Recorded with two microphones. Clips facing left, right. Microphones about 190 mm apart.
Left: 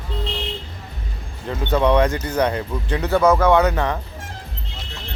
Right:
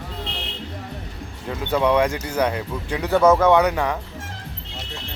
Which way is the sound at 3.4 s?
15° right (ahead or behind).